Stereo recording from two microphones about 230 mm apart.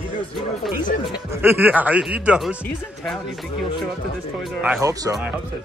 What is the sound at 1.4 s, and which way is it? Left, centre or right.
Speech, centre.